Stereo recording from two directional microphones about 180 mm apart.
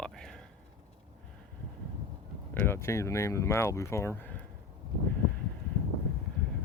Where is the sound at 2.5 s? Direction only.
10° left (ahead or behind).